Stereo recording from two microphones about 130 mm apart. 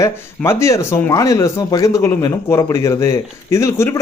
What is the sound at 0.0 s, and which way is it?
A man's voice, 20° left (ahead or behind).